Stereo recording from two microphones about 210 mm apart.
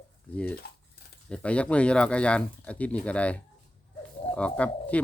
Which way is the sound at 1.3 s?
5° left (ahead or behind).